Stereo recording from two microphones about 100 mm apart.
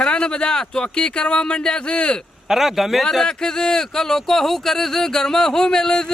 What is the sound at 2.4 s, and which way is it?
Speech, 5° right (ahead or behind).